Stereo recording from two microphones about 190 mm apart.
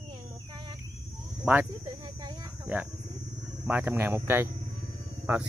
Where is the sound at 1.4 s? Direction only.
10° right (ahead or behind).